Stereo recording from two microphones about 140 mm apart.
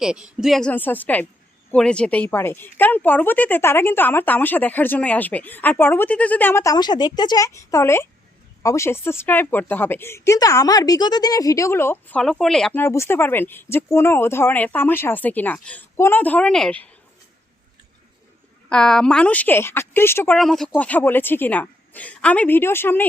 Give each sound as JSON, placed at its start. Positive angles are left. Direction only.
{"t": 0.0, "sound": "a woman's voice", "side_deg": -5}
{"t": 0.7, "sound": "speech", "side_deg": 15}
{"t": 12.7, "sound": "speech", "side_deg": 20}
{"t": 18.7, "sound": "speech", "side_deg": 5}
{"t": 20.3, "sound": "speech", "side_deg": 5}